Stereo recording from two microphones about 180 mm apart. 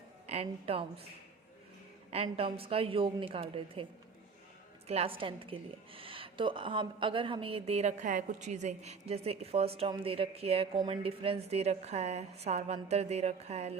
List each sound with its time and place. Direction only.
0.3 s a woman's voice: 35° right (ahead or behind)
2.0 s a woman's voice: 35° right (ahead or behind)
4.9 s a woman's voice: 35° right (ahead or behind)